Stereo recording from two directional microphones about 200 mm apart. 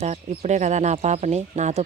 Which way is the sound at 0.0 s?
35° right (ahead or behind).